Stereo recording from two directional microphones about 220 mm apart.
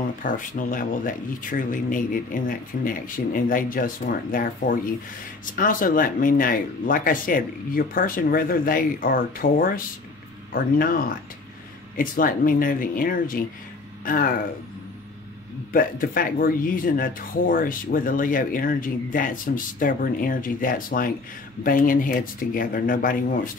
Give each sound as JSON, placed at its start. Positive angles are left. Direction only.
{"t": 0.2, "sound": "speech", "side_deg": 35}
{"t": 15.7, "sound": "speech", "side_deg": 40}